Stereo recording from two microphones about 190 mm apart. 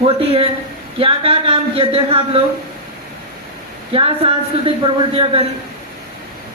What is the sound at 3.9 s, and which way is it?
A man's voice, 30° right (ahead or behind).